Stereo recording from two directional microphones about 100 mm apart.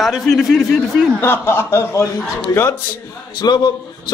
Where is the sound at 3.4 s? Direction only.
45° left (ahead or behind).